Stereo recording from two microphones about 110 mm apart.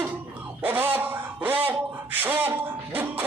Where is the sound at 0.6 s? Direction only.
15° right (ahead or behind).